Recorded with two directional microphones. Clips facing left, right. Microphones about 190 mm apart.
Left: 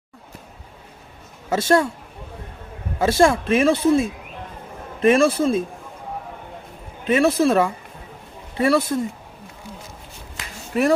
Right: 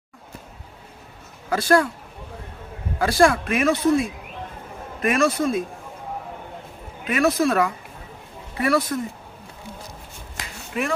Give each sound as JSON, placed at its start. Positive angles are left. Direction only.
{"t": 1.5, "sound": "speech", "side_deg": 25}
{"t": 3.0, "sound": "speech", "side_deg": 25}
{"t": 7.1, "sound": "speech", "side_deg": 30}
{"t": 10.7, "sound": "speech", "side_deg": 40}